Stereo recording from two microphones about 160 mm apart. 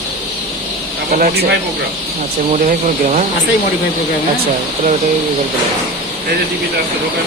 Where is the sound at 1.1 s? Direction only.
75° right (ahead or behind).